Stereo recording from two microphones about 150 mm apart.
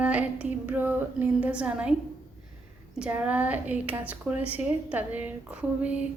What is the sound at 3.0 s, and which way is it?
A woman's voice, 10° right (ahead or behind).